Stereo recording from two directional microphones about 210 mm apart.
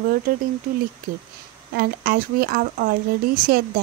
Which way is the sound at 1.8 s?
45° right (ahead or behind).